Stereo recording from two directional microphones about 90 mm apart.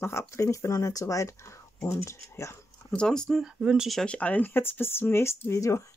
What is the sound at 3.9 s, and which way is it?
Speech, 10° left (ahead or behind).